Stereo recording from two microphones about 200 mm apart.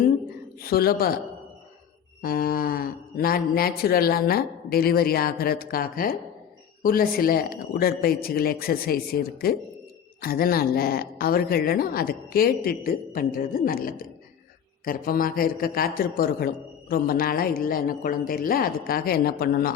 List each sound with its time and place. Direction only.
0.6 s a man's voice: 50° left (ahead or behind)
2.2 s speech: 45° left (ahead or behind)